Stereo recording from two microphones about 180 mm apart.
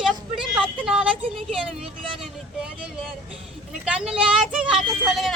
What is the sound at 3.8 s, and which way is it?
Speech, 5° right (ahead or behind).